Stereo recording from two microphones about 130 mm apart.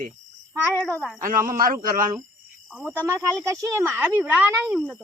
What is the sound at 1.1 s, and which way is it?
Speech, 90° right.